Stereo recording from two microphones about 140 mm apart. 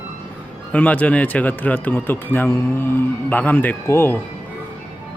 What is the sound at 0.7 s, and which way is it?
A man's voice, 10° left (ahead or behind).